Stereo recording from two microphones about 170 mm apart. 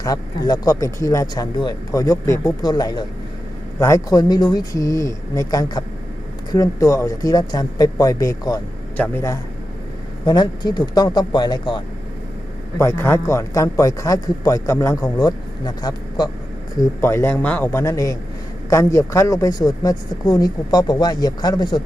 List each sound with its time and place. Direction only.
0.0 s a man's voice: 25° left (ahead or behind)
10.2 s speech: 25° left (ahead or behind)
12.8 s a man's voice: 15° left (ahead or behind)